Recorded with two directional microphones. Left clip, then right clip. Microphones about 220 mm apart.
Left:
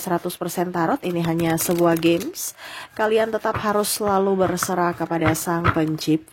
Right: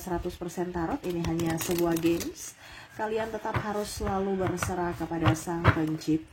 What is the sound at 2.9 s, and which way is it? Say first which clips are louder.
Speech: left 11 dB; 35° left (ahead or behind).